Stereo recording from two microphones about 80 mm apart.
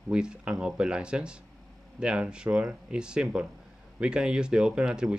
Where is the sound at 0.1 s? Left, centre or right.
Centre.